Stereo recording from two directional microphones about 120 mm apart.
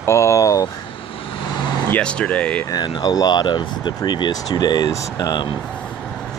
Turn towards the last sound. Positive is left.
turn(degrees=35)  # may be behind; listen again after turning